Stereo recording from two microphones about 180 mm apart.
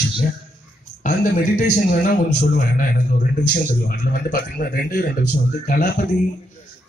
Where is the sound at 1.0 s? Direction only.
45° left (ahead or behind).